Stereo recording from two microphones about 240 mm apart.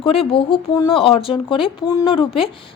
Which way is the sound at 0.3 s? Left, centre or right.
Left.